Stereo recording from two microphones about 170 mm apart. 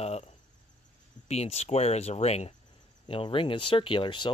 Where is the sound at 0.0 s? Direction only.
40° left (ahead or behind).